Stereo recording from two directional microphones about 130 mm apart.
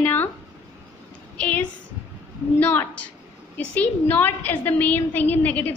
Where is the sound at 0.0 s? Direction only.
15° left (ahead or behind).